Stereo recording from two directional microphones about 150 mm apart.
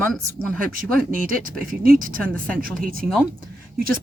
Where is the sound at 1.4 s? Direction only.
65° right (ahead or behind).